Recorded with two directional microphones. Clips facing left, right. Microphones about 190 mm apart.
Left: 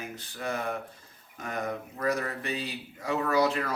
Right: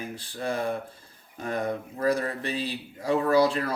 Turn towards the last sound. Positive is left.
turn(degrees=-30)  # may be behind; listen again after turning